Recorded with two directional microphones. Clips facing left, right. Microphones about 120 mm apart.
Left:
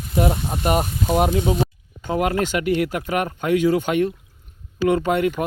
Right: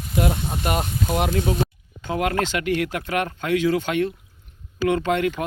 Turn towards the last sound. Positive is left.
turn(degrees=10)  # may be behind; listen again after turning